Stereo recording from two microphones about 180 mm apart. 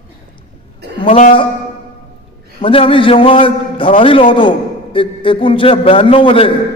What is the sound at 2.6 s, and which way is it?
A man's voice, 30° left (ahead or behind).